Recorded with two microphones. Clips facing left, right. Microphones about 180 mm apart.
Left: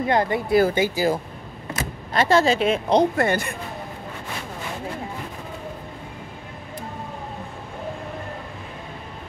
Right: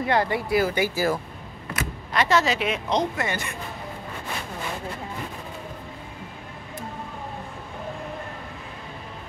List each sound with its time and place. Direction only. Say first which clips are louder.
0.0 s speech: left 2 dB; 20° left (ahead or behind)
1.8 s speech: left 2 dB; 30° left (ahead or behind)
3.2 s speech: left 7 dB; 55° left (ahead or behind)